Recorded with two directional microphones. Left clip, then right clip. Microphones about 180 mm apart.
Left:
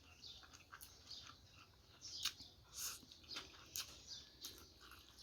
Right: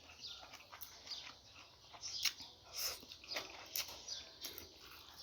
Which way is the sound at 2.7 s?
20° left (ahead or behind).